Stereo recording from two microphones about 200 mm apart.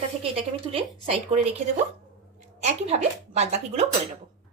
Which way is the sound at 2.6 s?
35° right (ahead or behind).